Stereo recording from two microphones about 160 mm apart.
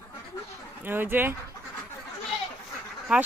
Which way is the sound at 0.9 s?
15° right (ahead or behind).